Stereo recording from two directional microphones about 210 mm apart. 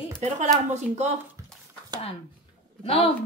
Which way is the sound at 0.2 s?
35° right (ahead or behind).